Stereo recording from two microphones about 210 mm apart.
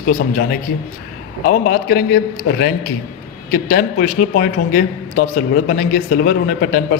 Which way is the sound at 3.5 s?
45° left (ahead or behind).